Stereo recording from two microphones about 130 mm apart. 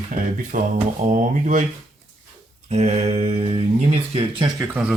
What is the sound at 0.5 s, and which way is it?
Speech, 90° right.